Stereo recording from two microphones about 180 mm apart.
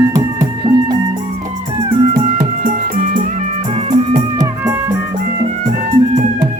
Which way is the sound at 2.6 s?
50° right (ahead or behind).